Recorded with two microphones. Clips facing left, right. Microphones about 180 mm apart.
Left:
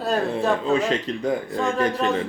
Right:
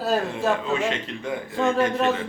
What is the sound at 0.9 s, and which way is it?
Speech, 35° left (ahead or behind).